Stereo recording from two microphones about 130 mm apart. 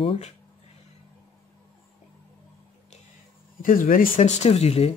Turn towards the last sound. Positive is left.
turn(degrees=50)  # may be behind; listen again after turning